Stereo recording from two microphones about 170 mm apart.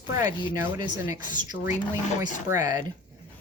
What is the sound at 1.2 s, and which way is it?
Speech, 50° left (ahead or behind).